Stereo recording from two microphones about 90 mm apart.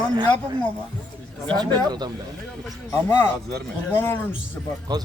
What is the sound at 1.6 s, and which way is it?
Speech, 50° right (ahead or behind).